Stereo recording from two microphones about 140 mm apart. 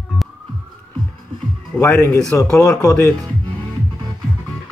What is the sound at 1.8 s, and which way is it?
Speech, 20° left (ahead or behind).